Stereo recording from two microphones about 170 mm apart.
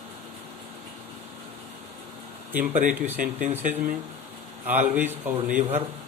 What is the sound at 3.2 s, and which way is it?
Speech, 50° right (ahead or behind).